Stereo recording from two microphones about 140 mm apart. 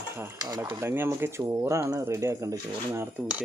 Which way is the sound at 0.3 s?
30° right (ahead or behind).